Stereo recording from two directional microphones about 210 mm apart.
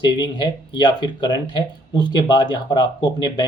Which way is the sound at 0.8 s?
20° left (ahead or behind).